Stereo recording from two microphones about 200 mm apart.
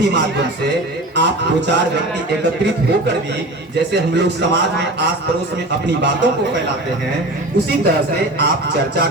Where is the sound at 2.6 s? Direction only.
55° right (ahead or behind).